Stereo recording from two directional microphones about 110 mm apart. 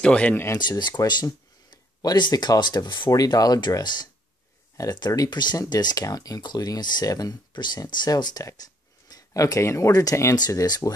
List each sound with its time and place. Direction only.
0.0 s speech: 10° left (ahead or behind)
0.5 s speech: 40° left (ahead or behind)